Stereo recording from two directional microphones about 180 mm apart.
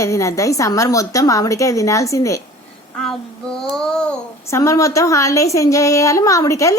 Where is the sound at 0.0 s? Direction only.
15° left (ahead or behind).